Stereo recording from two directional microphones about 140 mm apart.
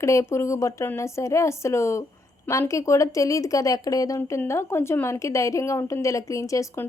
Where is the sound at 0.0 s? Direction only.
20° left (ahead or behind).